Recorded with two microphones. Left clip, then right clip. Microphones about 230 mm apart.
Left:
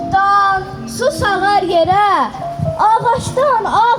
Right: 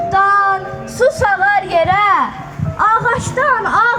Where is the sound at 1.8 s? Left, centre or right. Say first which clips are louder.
Even; right.